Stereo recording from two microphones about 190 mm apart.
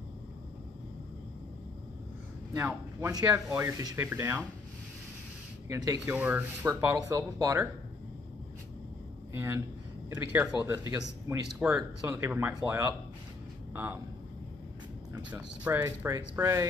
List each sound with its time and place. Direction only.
2.5 s speech: 15° right (ahead or behind)
5.7 s speech: 15° right (ahead or behind)
9.3 s speech: 10° right (ahead or behind)
15.1 s speech: 10° right (ahead or behind)